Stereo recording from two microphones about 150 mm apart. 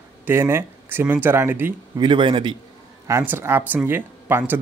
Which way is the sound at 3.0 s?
15° right (ahead or behind).